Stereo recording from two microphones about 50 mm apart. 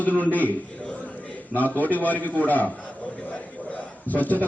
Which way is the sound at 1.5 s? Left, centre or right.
Left.